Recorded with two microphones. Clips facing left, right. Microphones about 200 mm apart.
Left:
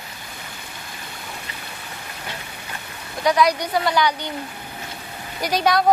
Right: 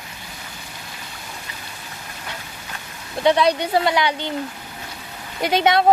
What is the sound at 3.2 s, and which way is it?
Speech, 30° right (ahead or behind).